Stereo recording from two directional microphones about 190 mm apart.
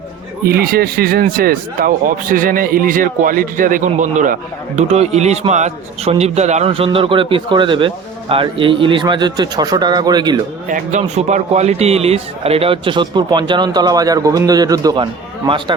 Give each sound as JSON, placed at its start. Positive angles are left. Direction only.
{"t": 0.4, "sound": "a man's voice", "side_deg": -55}
{"t": 10.7, "sound": "a man's voice", "side_deg": -40}